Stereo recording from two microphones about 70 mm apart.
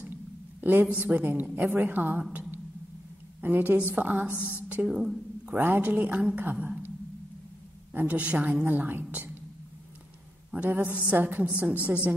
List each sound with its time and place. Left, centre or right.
0.0 s a sound: right
0.9 s a woman's voice: right
3.3 s a woman's voice: right
4.8 s a woman's voice: centre
7.9 s a woman's voice: right
10.5 s a woman's voice: right